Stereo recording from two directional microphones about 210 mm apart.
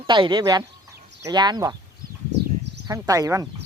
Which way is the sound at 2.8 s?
15° right (ahead or behind).